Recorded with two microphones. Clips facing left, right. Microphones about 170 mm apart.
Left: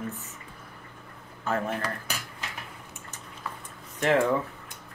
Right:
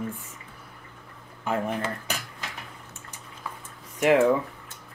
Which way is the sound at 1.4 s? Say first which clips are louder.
Right 1 dB; 15° right (ahead or behind).